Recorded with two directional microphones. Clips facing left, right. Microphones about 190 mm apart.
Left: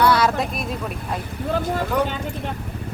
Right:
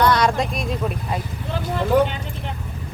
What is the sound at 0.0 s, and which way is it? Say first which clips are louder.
Vehicle: even; 5° left (ahead or behind).